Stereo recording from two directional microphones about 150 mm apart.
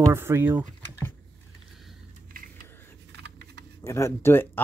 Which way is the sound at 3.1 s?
90° right.